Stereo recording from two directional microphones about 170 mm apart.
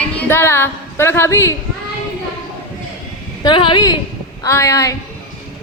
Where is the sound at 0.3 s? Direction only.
15° left (ahead or behind).